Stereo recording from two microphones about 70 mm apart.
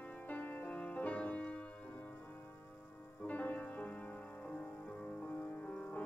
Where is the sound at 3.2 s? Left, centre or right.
Left.